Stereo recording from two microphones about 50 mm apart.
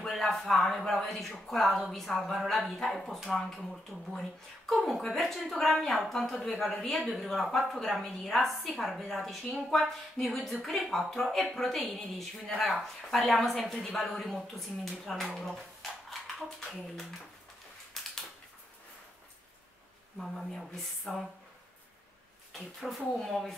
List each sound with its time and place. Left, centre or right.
0.0 s a woman's voice: centre
3.3 s speech: centre
3.5 s a woman's voice: centre
17.9 s a sound: centre
20.2 s a woman's voice: centre
22.5 s a woman's voice: centre